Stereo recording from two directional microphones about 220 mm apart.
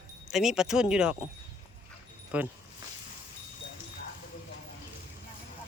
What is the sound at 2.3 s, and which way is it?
Speech, 5° right (ahead or behind).